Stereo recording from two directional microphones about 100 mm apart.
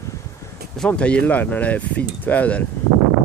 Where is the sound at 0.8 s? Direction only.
10° left (ahead or behind).